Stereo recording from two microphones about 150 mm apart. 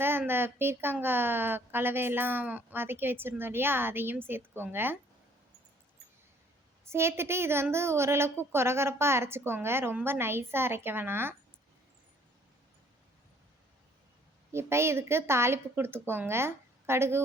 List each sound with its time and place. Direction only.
0.0 s a woman's voice: 15° right (ahead or behind)
6.8 s a woman's voice: 15° right (ahead or behind)
14.5 s a woman's voice: 15° right (ahead or behind)